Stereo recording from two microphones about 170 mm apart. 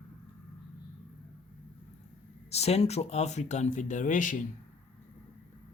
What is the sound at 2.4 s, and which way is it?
Speech, 40° left (ahead or behind).